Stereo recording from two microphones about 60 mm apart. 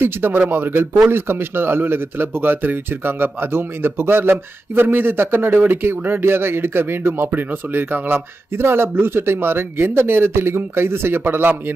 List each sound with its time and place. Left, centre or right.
0.0 s speech: right